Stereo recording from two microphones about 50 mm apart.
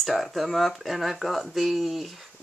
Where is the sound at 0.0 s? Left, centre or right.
Centre.